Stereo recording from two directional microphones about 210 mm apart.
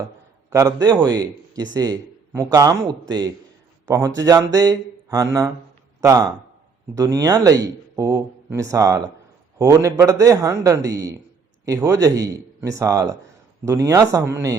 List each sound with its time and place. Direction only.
0.5 s a man's voice: 15° right (ahead or behind)